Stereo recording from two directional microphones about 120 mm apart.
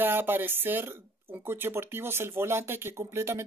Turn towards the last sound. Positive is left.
turn(degrees=-20)  # may be behind; listen again after turning